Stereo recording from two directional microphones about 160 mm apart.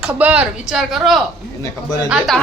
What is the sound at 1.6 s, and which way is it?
Speech, 25° left (ahead or behind).